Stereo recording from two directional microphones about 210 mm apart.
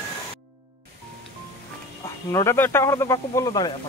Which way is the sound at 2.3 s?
15° left (ahead or behind).